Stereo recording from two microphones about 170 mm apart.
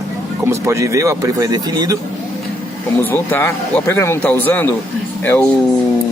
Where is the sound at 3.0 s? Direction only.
15° left (ahead or behind).